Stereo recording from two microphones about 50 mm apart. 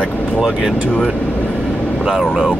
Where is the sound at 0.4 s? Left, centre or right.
Centre.